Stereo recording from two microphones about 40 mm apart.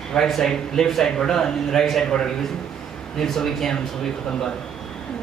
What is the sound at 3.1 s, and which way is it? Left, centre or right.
Speech, centre.